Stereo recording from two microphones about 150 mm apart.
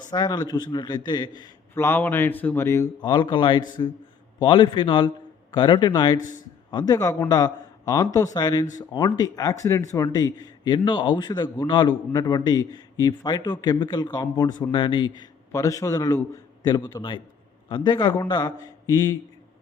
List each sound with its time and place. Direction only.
0.1 s a man's voice: 25° left (ahead or behind)
1.7 s a man's voice: 15° left (ahead or behind)
3.0 s a man's voice: 30° left (ahead or behind)